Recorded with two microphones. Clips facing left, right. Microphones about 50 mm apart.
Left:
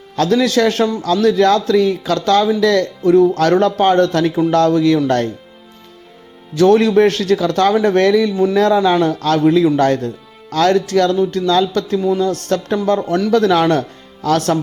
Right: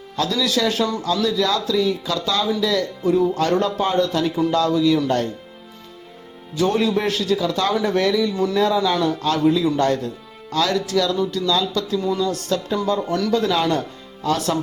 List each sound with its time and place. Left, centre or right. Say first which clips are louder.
0.2 s speech: left 7 dB; left
6.6 s speech: left 9 dB; left
9.2 s speech: left 5 dB; left
11.9 s speech: left 6 dB; centre
12.2 s speech: left 5 dB; left
13.3 s speech: left 7 dB; left